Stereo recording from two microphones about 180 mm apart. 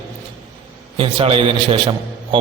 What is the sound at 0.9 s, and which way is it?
A man's voice, 30° right (ahead or behind).